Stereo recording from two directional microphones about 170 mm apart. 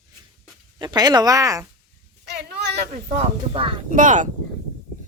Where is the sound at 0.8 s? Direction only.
25° right (ahead or behind).